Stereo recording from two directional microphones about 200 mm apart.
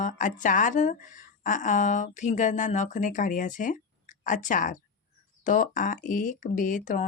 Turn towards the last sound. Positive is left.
turn(degrees=40)  # may be behind; listen again after turning